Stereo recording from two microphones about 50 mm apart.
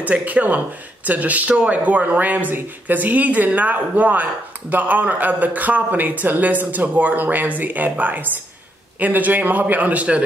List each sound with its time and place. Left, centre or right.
0.0 s speech: right